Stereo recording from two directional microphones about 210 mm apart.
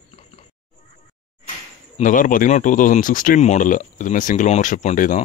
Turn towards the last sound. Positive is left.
turn(degrees=35)  # may be behind; listen again after turning